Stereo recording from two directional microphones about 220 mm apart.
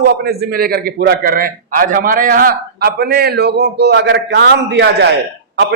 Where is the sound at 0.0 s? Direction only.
45° right (ahead or behind).